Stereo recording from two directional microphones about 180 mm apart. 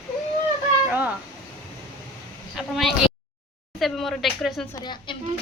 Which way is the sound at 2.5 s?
Centre (ahead or behind).